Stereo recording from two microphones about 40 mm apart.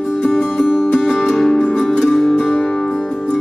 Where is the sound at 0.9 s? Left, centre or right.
Left.